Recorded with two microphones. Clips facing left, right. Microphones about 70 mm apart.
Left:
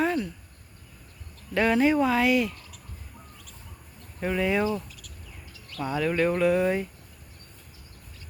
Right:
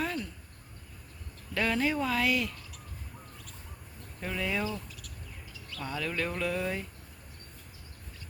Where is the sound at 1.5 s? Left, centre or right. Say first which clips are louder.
Left 8 dB; left.